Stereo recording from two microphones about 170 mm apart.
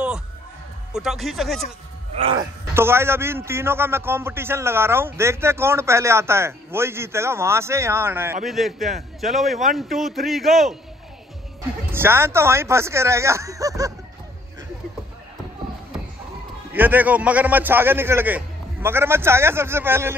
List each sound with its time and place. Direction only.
0.9 s a man's voice: centre (ahead or behind)
2.3 s a man's voice: 15° right (ahead or behind)
8.5 s a man's voice: centre (ahead or behind)
11.9 s a man's voice: 15° right (ahead or behind)
16.7 s a man's voice: 10° right (ahead or behind)